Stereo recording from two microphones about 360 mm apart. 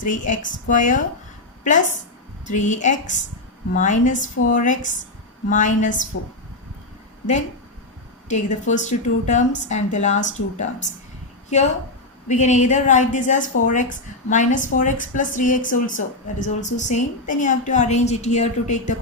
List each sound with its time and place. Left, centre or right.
0.0 s a woman's voice: left
2.5 s a woman's voice: left
8.3 s a woman's voice: centre
12.3 s a woman's voice: centre